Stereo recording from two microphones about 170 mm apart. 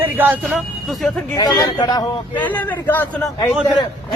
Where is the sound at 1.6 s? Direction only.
25° left (ahead or behind).